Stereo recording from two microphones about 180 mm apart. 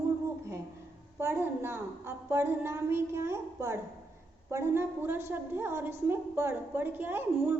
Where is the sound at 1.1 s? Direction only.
15° right (ahead or behind).